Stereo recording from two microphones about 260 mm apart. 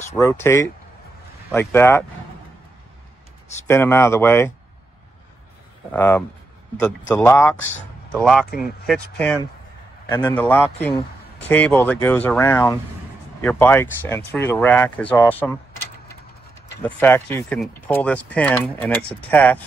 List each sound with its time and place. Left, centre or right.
0.2 s speech: centre
3.6 s speech: centre
5.9 s speech: centre
10.0 s a man's voice: centre
16.8 s speech: centre